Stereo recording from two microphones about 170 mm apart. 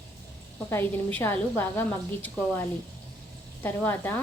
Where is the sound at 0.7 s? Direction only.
15° left (ahead or behind).